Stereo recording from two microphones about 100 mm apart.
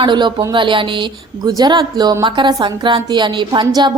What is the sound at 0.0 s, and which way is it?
A woman's voice, 50° right (ahead or behind).